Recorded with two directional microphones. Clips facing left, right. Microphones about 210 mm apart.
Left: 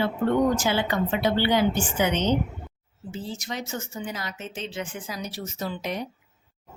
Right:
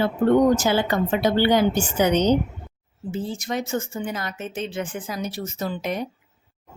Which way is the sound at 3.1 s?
55° right (ahead or behind).